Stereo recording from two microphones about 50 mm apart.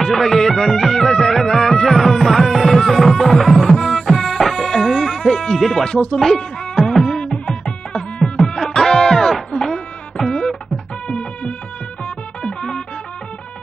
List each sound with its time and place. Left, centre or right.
0.0 s music: centre
6.1 s speech: centre
6.8 s music: centre
7.2 s music: centre
9.5 s a sound: centre
11.1 s music: left